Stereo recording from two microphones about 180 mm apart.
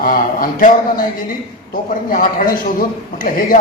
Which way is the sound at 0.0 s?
50° left (ahead or behind).